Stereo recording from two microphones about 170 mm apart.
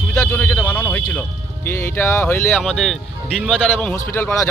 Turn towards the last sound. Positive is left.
turn(degrees=15)  # may be behind; listen again after turning